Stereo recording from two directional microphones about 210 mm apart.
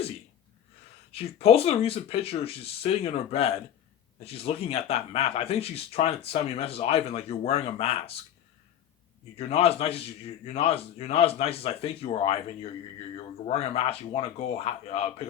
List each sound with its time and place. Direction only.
1.1 s speech: 30° left (ahead or behind)
9.4 s speech: 30° left (ahead or behind)
13.5 s speech: 30° left (ahead or behind)